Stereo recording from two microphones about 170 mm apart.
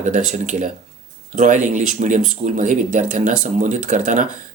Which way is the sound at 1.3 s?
45° right (ahead or behind).